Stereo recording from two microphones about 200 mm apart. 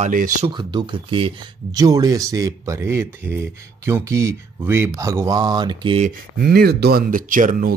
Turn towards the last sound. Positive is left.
turn(degrees=-40)  # may be behind; listen again after turning